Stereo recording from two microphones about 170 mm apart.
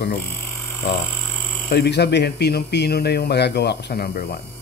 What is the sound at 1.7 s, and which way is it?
Speech, 80° left.